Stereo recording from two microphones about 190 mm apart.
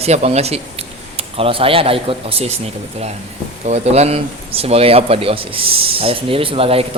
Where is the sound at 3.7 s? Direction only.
35° right (ahead or behind).